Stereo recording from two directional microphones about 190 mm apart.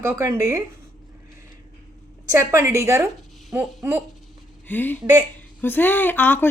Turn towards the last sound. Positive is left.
turn(degrees=10)  # may be behind; listen again after turning